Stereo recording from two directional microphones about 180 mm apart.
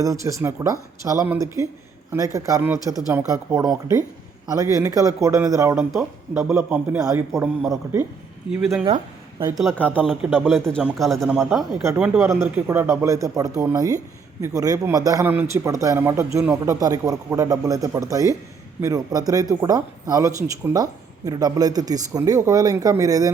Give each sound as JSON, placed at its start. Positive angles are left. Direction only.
{"t": 0.0, "sound": "a man's voice", "side_deg": -20}
{"t": 5.9, "sound": "a man's voice", "side_deg": -5}
{"t": 9.6, "sound": "a man's voice", "side_deg": 5}